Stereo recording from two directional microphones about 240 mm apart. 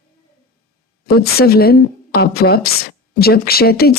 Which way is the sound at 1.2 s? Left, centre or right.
Left.